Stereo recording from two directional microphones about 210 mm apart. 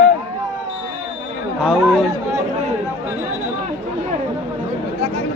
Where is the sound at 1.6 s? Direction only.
5° right (ahead or behind).